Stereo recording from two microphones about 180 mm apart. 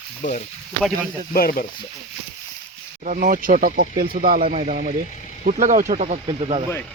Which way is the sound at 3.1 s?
45° right (ahead or behind).